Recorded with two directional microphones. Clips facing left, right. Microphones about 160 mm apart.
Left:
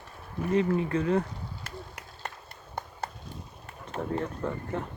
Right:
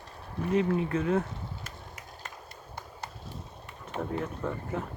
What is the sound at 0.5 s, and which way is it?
Speech, centre (ahead or behind).